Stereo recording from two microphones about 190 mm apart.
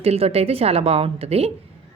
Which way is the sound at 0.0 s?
30° right (ahead or behind).